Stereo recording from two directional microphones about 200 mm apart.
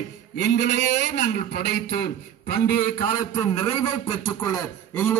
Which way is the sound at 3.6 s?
25° left (ahead or behind).